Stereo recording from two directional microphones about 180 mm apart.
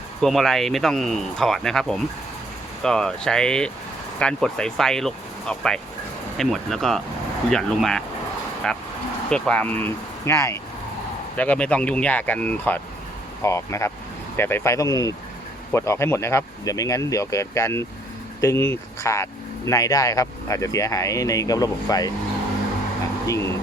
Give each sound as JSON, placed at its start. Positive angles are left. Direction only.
{"t": 0.2, "sound": "speech", "side_deg": 0}